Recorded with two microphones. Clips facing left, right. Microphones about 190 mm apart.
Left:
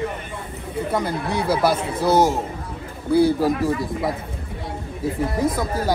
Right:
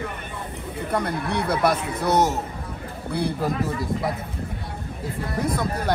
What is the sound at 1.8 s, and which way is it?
Speech, 30° left (ahead or behind).